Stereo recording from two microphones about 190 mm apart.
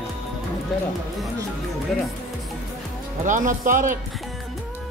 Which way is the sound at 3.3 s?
40° right (ahead or behind).